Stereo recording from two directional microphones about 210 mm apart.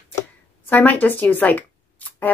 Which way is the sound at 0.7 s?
10° left (ahead or behind).